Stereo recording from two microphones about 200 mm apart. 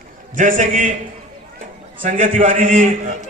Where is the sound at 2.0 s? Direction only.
40° right (ahead or behind).